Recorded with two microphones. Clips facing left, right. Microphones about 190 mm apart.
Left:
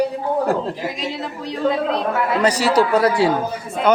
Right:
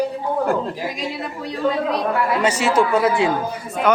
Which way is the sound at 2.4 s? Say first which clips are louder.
Left 3 dB; 35° left (ahead or behind).